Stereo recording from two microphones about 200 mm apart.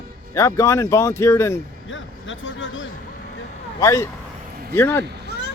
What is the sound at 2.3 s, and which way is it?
Speech, 70° left (ahead or behind).